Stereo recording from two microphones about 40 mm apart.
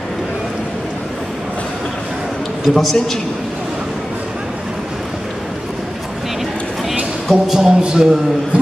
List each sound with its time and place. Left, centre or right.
2.6 s a man's voice: centre
7.2 s a sound: centre
7.8 s a man's voice: centre